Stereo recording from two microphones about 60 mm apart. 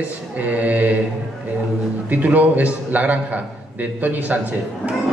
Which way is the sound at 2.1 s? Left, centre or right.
Right.